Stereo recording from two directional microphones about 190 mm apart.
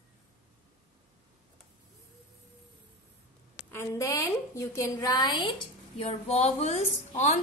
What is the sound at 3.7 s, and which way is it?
A woman's voice, 15° left (ahead or behind).